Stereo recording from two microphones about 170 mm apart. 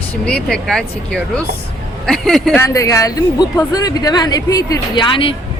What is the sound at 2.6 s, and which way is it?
A woman's voice, 20° left (ahead or behind).